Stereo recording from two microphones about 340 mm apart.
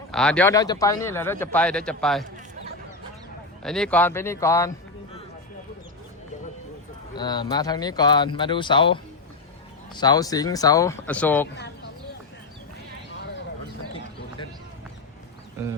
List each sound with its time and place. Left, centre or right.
0.1 s a man's voice: centre
3.6 s speech: centre
7.2 s speech: centre